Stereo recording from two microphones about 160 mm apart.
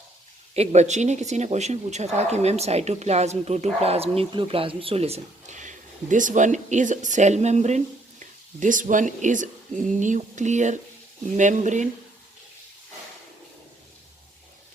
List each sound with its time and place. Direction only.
0.5 s a woman's voice: 45° right (ahead or behind)